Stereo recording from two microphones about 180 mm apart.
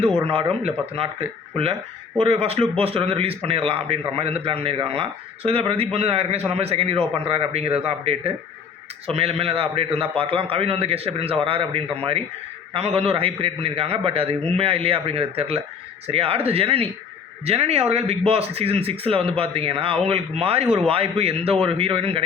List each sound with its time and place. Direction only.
0.3 s speech: 30° right (ahead or behind)